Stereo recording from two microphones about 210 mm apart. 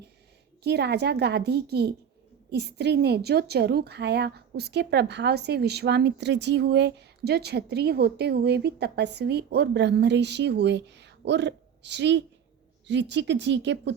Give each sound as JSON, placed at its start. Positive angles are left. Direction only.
{"t": 0.6, "sound": "a woman's voice", "side_deg": -50}